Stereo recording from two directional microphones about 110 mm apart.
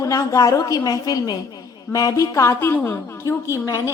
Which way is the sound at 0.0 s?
30° left (ahead or behind).